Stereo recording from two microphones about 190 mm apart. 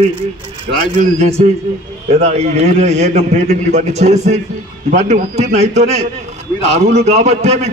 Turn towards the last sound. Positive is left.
turn(degrees=-35)  # may be behind; listen again after turning